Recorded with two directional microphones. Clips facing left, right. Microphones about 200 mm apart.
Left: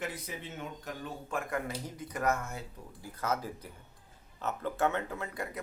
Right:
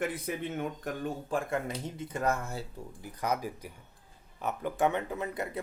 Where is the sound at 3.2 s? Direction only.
15° right (ahead or behind).